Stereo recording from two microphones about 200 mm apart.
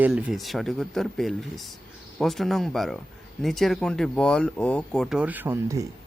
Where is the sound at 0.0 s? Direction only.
5° right (ahead or behind).